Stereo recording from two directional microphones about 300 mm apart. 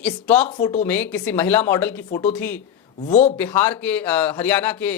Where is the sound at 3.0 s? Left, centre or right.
Left.